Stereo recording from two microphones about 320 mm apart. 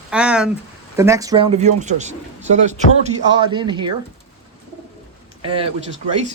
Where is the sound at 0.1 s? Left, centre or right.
Centre.